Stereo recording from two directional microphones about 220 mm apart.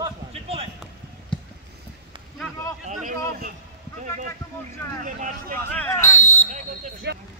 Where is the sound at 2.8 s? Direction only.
35° right (ahead or behind).